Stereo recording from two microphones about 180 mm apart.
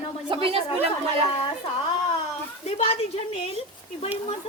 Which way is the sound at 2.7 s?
35° left (ahead or behind).